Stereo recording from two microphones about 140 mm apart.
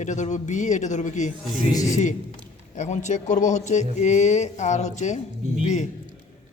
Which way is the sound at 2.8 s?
60° left (ahead or behind).